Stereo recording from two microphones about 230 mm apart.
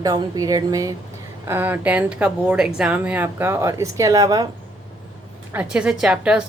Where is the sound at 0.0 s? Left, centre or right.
Centre.